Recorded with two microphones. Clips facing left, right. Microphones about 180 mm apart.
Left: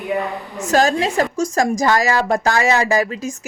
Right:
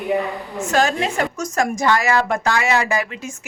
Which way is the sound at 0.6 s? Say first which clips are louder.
Left 3 dB; 40° left (ahead or behind).